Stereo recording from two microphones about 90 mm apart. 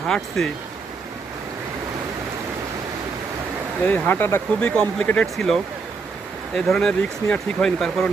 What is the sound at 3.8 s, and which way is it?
Speech, 15° left (ahead or behind).